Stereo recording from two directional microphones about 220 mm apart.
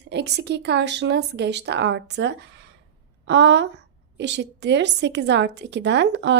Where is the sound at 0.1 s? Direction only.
50° right (ahead or behind).